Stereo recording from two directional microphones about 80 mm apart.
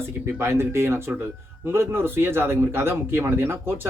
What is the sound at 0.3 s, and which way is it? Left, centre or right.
Speech, right.